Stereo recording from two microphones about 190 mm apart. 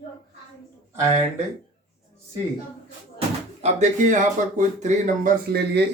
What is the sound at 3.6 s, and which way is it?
Speech, 40° right (ahead or behind).